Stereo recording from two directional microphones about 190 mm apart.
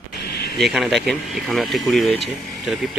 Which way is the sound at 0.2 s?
55° left (ahead or behind).